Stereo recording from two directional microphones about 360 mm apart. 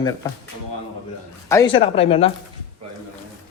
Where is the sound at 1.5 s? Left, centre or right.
Centre.